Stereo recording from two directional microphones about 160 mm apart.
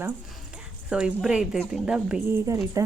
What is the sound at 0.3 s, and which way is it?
A woman's voice, 5° right (ahead or behind).